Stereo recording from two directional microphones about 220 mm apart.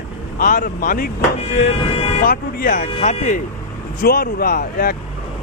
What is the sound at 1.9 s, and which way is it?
Speech, 25° left (ahead or behind).